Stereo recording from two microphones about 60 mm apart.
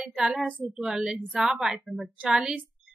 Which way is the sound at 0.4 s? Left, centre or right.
Right.